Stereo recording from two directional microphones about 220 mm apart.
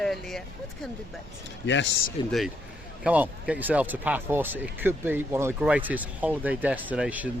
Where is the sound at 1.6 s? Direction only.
55° left (ahead or behind).